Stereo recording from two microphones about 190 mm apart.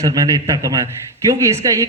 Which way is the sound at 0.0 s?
20° right (ahead or behind).